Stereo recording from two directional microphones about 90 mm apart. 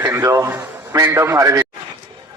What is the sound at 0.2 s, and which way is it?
A man's voice, 35° right (ahead or behind).